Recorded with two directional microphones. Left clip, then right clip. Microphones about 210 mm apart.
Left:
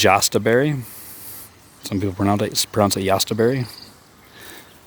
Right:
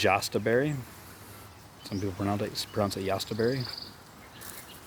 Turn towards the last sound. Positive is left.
turn(degrees=45)  # may be behind; listen again after turning